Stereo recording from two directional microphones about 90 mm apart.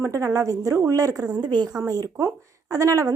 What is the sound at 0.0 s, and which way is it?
A woman's voice, 35° right (ahead or behind).